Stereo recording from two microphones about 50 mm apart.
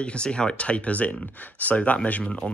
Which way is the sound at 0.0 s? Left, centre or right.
Left.